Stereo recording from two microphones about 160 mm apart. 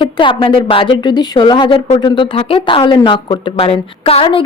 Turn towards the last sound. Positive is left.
turn(degrees=35)  # may be behind; listen again after turning